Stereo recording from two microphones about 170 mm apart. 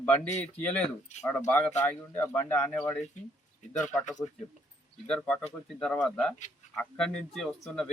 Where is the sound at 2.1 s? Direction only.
10° left (ahead or behind).